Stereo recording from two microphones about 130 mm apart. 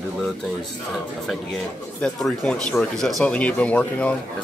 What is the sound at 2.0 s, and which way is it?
Speech, 5° left (ahead or behind).